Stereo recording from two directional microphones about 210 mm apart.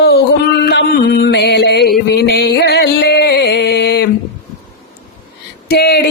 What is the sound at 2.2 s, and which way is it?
Music, 50° left (ahead or behind).